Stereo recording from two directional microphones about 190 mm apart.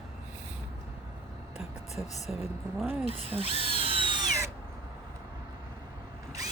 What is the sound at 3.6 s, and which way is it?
Drill, 30° right (ahead or behind).